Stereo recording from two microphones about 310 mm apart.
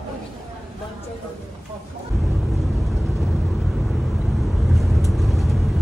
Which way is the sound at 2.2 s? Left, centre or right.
Centre.